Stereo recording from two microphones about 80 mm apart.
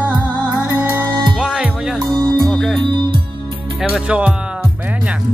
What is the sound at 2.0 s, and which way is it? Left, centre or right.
Music, right.